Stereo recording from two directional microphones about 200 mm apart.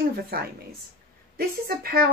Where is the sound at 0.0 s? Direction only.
50° right (ahead or behind).